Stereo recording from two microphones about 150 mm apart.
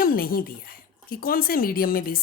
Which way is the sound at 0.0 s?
75° left (ahead or behind).